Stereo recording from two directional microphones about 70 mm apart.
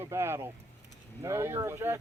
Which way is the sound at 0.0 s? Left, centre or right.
Right.